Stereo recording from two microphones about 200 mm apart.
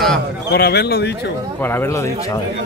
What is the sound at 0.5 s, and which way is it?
Speech, 55° left (ahead or behind).